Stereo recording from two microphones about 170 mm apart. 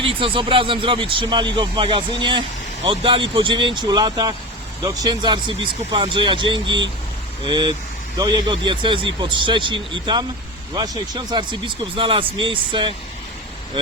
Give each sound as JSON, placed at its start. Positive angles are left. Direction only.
{"t": 0.0, "sound": "speech", "side_deg": -30}